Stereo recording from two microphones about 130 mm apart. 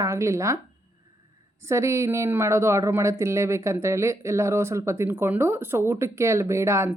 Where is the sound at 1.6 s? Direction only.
20° right (ahead or behind).